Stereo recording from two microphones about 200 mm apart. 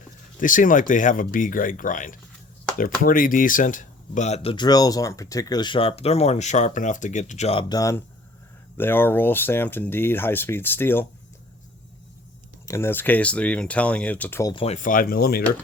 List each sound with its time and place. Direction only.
0.3 s speech: 40° left (ahead or behind)
4.5 s speech: 20° left (ahead or behind)
7.7 s speech: 15° left (ahead or behind)
12.6 s speech: 15° left (ahead or behind)
14.5 s speech: 30° left (ahead or behind); by 15.4 s 50° left (ahead or behind)